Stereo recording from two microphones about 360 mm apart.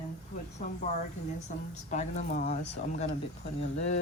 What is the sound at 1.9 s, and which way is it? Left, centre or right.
Speech, centre.